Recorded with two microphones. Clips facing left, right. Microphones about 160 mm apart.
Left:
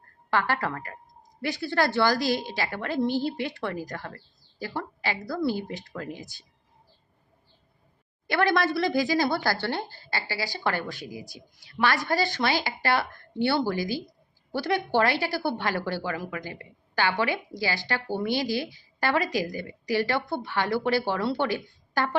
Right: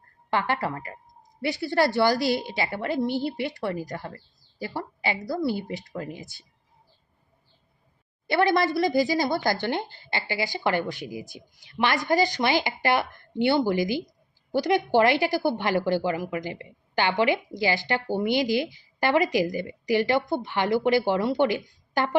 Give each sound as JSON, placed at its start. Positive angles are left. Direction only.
{"t": 0.3, "sound": "a woman's voice", "side_deg": -15}
{"t": 8.3, "sound": "a woman's voice", "side_deg": -20}